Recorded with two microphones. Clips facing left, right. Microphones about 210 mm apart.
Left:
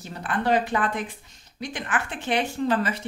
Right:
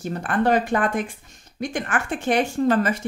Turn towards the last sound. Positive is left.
turn(degrees=-45)  # may be behind; listen again after turning